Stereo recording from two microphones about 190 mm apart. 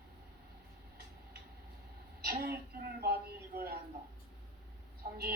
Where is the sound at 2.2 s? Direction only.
55° right (ahead or behind).